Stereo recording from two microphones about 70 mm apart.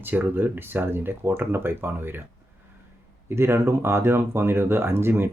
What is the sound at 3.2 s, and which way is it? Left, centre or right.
Speech, right.